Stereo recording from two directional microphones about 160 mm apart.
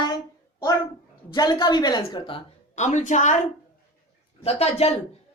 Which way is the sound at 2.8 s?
45° left (ahead or behind).